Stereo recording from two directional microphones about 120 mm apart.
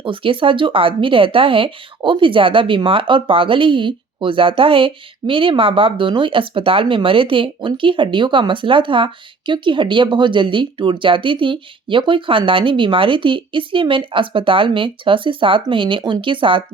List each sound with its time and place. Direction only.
0.0 s speech: 45° right (ahead or behind)